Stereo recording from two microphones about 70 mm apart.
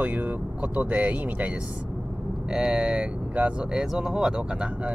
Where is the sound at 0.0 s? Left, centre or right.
Right.